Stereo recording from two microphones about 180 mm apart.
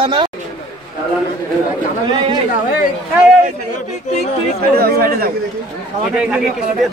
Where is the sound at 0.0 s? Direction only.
25° right (ahead or behind).